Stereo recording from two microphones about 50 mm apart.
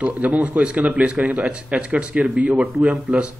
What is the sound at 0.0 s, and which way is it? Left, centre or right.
Speech, right.